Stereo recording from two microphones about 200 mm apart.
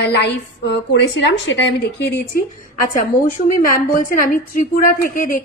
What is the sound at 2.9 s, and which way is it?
A woman's voice, 40° left (ahead or behind).